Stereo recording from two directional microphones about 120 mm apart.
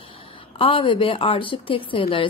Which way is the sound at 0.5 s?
50° left (ahead or behind).